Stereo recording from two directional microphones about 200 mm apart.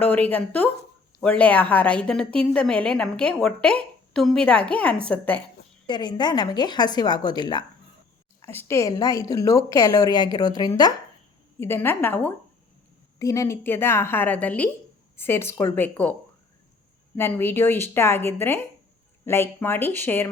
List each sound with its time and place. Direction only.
0.0 s a woman's voice: 10° left (ahead or behind)
5.9 s a woman's voice: 20° left (ahead or behind)
17.2 s a woman's voice: 10° left (ahead or behind)